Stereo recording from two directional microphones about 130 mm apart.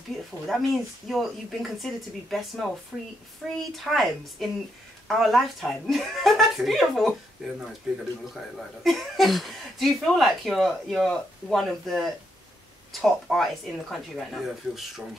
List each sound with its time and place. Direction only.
0.5 s speech: centre (ahead or behind)
2.9 s a woman's voice: 10° right (ahead or behind)
3.4 s speech: 5° left (ahead or behind)